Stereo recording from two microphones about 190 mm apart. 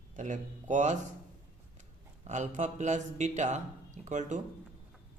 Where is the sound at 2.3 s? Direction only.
40° right (ahead or behind).